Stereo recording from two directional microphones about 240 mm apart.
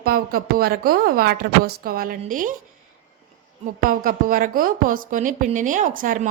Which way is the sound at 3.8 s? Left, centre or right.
Right.